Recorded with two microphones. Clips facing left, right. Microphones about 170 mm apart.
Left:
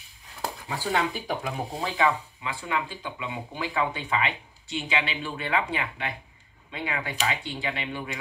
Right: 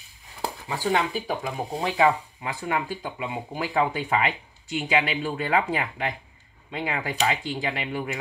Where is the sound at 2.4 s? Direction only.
45° right (ahead or behind).